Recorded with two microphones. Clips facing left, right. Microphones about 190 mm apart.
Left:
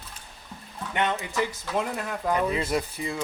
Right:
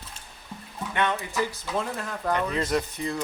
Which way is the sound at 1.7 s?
10° left (ahead or behind).